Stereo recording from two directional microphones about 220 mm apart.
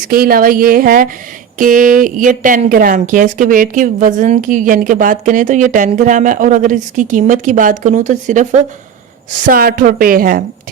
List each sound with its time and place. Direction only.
0.1 s speech: 40° right (ahead or behind)